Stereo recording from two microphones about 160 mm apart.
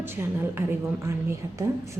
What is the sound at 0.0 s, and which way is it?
A woman's voice, 15° right (ahead or behind).